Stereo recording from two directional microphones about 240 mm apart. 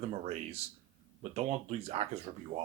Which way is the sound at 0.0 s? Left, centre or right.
Right.